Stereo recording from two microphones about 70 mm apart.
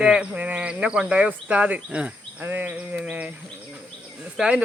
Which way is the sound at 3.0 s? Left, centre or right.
Right.